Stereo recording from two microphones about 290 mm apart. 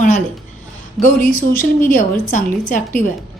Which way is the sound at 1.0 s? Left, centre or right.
Left.